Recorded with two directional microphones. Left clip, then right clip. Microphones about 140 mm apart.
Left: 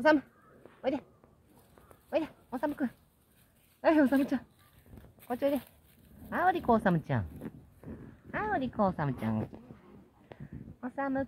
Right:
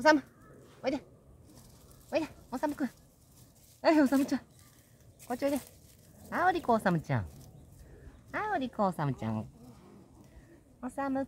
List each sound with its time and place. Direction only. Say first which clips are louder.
0.0 s speech: right 1 dB; 25° left (ahead or behind)
2.0 s speech: even; 25° left (ahead or behind)
8.3 s speech: even; 20° left (ahead or behind)
10.8 s speech: even; 10° left (ahead or behind)